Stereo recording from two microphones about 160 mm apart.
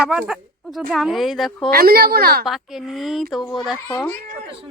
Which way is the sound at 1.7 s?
70° right (ahead or behind).